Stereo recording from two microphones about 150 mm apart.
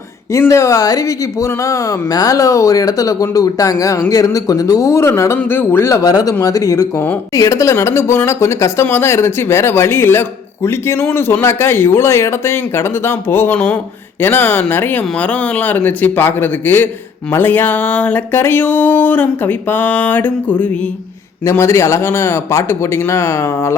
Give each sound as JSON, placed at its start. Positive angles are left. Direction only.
{"t": 0.3, "sound": "speech", "side_deg": 20}